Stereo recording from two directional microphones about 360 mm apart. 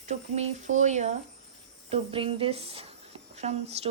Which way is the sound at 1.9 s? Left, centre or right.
Centre.